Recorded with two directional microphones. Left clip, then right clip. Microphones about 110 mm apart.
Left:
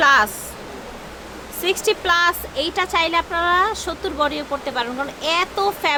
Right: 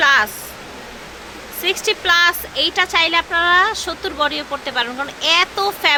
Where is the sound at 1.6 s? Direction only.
35° left (ahead or behind); by 5.9 s 5° left (ahead or behind).